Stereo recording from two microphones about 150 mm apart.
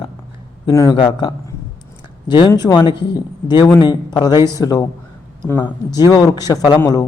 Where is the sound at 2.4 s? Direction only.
30° left (ahead or behind).